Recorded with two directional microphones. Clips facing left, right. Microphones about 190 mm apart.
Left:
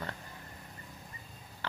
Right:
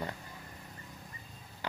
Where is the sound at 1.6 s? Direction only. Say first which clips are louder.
Right 2 dB; 15° right (ahead or behind).